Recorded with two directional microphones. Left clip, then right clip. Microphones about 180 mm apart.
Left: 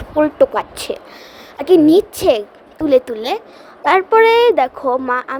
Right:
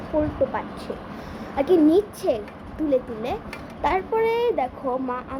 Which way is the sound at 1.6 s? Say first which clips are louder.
Left 8 dB; 55° left (ahead or behind).